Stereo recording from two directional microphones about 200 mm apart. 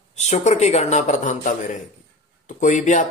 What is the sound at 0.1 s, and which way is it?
Speech, 35° left (ahead or behind).